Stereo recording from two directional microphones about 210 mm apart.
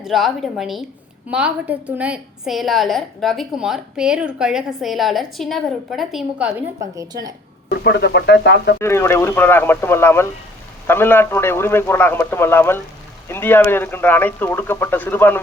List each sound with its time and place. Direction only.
0.0 s a woman's voice: centre (ahead or behind)
6.9 s a woman's voice: 15° right (ahead or behind)
7.7 s speech: 50° left (ahead or behind)
8.8 s speech: 10° left (ahead or behind)